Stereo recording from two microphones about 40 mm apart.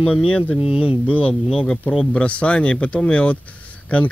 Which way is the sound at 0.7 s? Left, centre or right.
Right.